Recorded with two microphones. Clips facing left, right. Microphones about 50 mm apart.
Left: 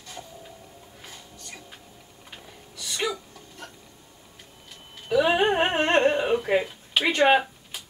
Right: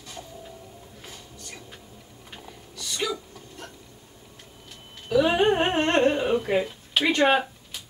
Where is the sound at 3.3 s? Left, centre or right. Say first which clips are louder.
Right 1 dB; centre.